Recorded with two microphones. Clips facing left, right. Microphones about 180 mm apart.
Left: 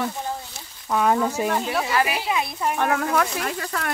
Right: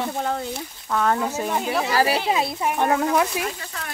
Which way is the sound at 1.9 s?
35° right (ahead or behind).